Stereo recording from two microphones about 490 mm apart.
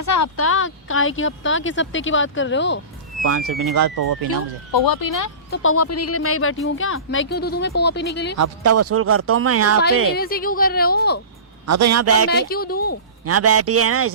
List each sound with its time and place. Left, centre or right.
0.0 s speech: left
3.2 s speech: right
4.7 s speech: left
5.5 s speech: left
8.4 s speech: right
10.2 s speech: centre
11.6 s speech: right
12.3 s speech: centre
13.2 s speech: right